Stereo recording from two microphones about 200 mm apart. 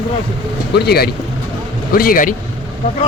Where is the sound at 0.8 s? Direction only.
50° left (ahead or behind).